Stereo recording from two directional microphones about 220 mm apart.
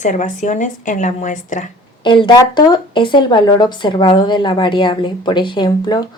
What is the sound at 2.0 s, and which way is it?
Speech, 20° left (ahead or behind).